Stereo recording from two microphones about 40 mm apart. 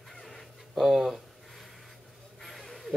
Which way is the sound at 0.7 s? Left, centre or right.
Centre.